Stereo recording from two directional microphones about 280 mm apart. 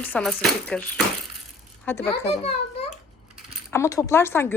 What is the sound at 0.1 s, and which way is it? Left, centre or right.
A woman's voice, centre.